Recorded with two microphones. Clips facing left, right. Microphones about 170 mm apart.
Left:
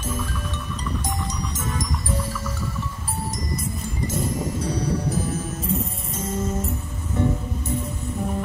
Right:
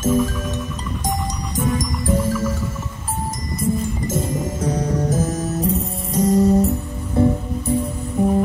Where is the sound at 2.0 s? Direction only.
45° right (ahead or behind).